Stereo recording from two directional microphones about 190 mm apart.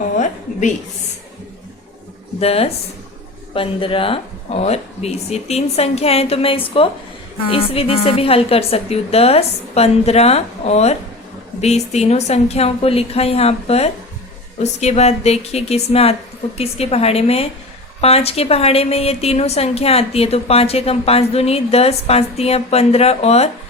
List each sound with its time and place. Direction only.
2.4 s a woman's voice: 30° left (ahead or behind)